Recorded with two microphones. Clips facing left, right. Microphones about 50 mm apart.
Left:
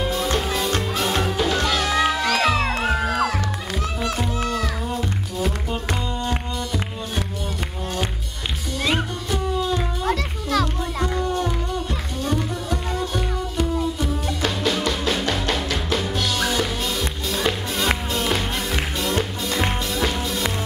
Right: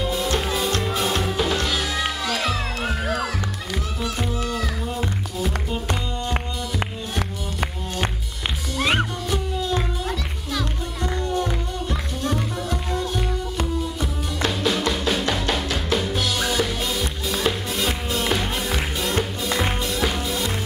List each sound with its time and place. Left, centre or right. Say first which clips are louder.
0.1 s music: left 1 dB; centre
1.8 s music: left 5 dB; left
10.0 s music: left 5 dB; left
12.3 s music: left 1 dB; centre